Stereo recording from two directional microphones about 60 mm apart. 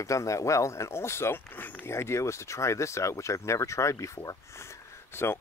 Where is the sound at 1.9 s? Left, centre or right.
Left.